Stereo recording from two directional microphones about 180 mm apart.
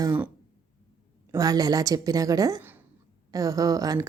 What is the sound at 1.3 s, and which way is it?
A woman's voice, 20° right (ahead or behind).